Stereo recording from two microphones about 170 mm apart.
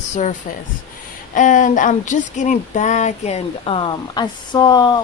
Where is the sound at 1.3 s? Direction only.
50° left (ahead or behind); by 5.0 s 25° left (ahead or behind).